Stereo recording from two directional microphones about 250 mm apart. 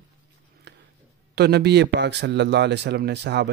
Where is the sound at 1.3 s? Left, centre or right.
Right.